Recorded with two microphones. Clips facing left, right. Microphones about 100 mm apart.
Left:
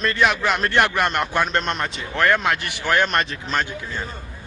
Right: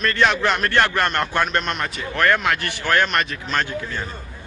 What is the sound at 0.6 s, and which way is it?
Speech, 15° left (ahead or behind).